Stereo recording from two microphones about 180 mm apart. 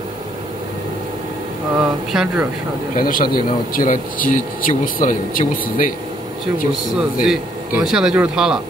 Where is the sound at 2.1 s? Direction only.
5° right (ahead or behind).